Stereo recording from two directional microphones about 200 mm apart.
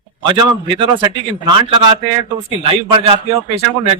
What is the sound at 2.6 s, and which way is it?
A man's voice, 30° right (ahead or behind).